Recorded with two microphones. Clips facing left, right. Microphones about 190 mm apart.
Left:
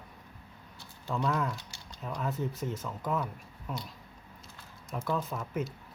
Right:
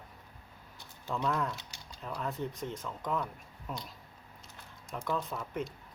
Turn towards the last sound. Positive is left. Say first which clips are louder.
# left 2 dB
turn(degrees=5)  # may be behind; listen again after turning